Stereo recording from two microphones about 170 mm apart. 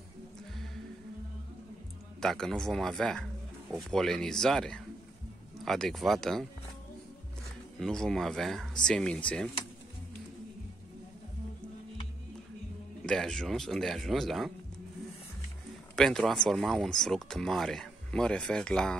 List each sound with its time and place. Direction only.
2.1 s speech: 5° left (ahead or behind)
7.8 s speech: 5° left (ahead or behind)
13.0 s speech: 5° left (ahead or behind)
16.0 s speech: centre (ahead or behind)